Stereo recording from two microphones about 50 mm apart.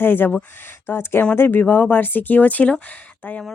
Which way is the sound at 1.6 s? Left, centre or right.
Left.